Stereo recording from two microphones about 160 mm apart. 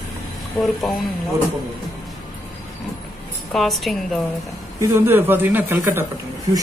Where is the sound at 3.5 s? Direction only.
Centre (ahead or behind).